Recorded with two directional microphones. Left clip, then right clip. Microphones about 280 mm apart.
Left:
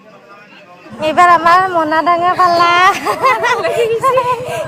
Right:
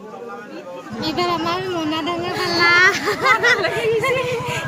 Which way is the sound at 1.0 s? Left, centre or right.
Left.